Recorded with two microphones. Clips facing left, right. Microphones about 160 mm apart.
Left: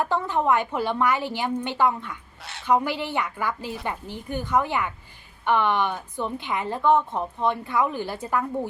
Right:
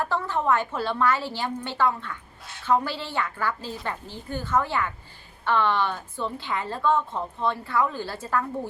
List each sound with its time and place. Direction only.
0.0 s a woman's voice: 15° left (ahead or behind)
2.4 s a sound: 75° left (ahead or behind)
2.6 s a woman's voice: 15° left (ahead or behind)